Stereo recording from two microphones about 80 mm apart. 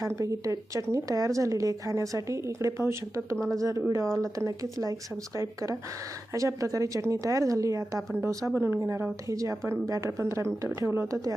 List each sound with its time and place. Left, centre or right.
0.2 s speech: right
3.3 s a woman's voice: centre
3.6 s speech: right
6.3 s speech: right
8.5 s speech: right